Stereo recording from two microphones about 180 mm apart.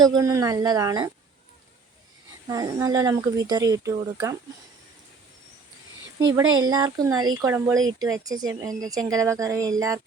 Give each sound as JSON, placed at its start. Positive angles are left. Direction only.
{"t": 0.0, "sound": "speech", "side_deg": -20}
{"t": 2.5, "sound": "speech", "side_deg": -20}
{"t": 6.1, "sound": "speech", "side_deg": -20}